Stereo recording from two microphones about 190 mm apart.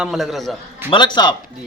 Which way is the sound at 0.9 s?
25° left (ahead or behind).